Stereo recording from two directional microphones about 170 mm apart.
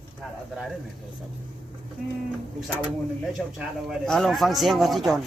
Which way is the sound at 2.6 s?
Centre (ahead or behind).